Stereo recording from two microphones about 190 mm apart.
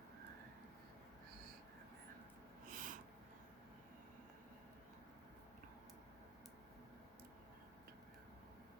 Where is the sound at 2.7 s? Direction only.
45° right (ahead or behind).